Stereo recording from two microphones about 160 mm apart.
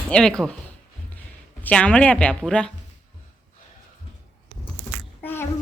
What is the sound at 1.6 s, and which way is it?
A woman's voice, 10° left (ahead or behind).